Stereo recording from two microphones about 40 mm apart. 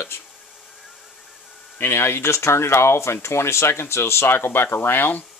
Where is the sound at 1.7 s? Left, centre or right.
Left.